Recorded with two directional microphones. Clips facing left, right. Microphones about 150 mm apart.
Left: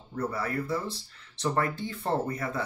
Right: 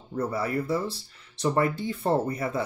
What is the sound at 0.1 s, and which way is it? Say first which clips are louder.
Speech: right 3 dB; 15° right (ahead or behind).